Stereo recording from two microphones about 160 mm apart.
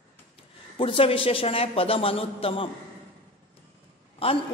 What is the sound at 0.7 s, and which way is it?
A woman's voice, 35° left (ahead or behind).